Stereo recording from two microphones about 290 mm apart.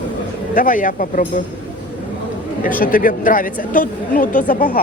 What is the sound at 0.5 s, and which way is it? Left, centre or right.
Speech, left.